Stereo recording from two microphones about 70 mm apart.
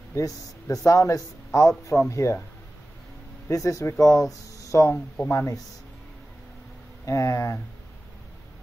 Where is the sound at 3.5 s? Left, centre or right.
Left.